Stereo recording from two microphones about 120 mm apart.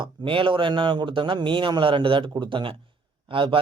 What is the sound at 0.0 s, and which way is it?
Mantra, 45° right (ahead or behind).